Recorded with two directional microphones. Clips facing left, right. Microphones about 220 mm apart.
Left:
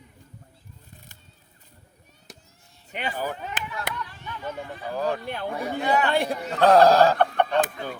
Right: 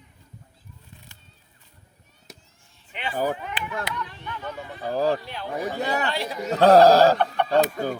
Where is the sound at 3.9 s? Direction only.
50° left (ahead or behind).